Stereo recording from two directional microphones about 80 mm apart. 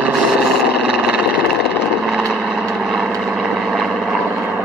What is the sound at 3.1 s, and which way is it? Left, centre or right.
Vehicle, centre.